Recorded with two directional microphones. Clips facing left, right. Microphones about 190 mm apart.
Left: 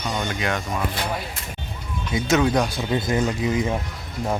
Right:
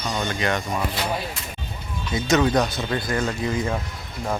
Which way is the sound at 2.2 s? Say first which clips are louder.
Even; 5° left (ahead or behind).